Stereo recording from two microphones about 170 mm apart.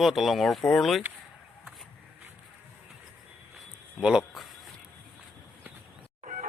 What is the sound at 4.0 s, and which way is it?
Speech, 5° right (ahead or behind).